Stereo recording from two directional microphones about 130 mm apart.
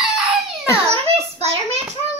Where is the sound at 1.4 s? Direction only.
55° right (ahead or behind).